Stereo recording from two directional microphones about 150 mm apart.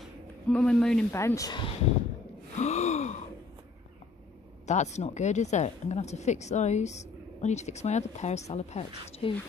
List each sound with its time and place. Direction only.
0.0 s a sound: 5° left (ahead or behind)
1.1 s speech: 20° left (ahead or behind)
2.5 s gasp: 50° left (ahead or behind)
4.6 s a woman's voice: 50° left (ahead or behind)